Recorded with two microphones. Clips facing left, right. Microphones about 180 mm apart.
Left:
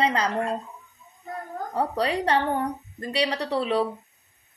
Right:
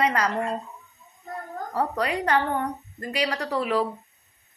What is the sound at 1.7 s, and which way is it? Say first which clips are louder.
A woman's voice: left 1 dB; 30° left (ahead or behind).